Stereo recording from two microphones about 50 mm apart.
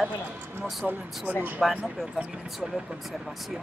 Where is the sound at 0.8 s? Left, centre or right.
Right.